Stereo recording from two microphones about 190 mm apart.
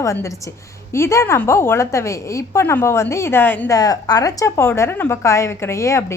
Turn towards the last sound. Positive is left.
turn(degrees=15)  # may be behind; listen again after turning